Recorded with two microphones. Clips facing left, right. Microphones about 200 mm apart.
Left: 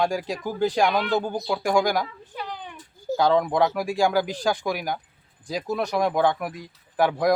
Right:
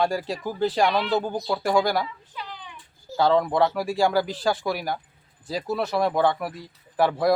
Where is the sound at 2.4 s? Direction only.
50° left (ahead or behind).